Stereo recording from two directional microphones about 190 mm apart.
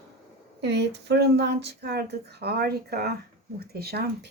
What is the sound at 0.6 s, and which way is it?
Speech, 65° right (ahead or behind).